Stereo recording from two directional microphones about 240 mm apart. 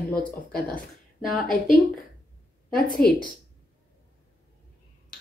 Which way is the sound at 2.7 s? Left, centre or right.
Left.